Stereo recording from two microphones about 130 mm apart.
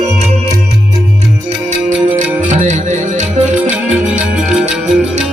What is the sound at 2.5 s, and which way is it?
Music, 65° right (ahead or behind).